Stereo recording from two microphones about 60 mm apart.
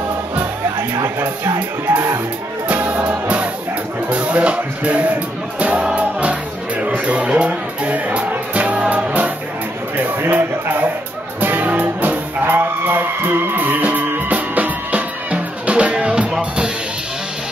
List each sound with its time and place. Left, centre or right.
1.0 s speech: right
2.7 s music: right
9.9 s a sound: right
11.4 s music: right